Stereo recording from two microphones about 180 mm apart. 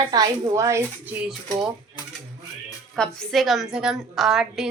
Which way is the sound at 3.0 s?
Centre (ahead or behind).